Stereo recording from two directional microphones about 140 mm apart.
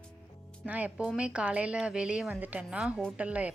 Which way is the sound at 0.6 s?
10° right (ahead or behind).